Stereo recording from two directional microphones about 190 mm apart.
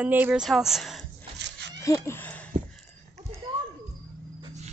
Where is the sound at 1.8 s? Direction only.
15° left (ahead or behind).